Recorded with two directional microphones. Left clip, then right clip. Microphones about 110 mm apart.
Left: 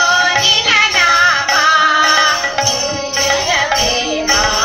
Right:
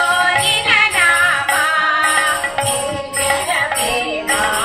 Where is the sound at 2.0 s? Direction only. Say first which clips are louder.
Left 3 dB; 30° right (ahead or behind).